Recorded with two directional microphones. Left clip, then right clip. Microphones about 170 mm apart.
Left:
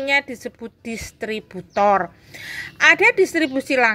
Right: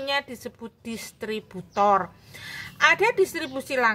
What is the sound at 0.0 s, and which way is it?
A woman's voice, 10° left (ahead or behind).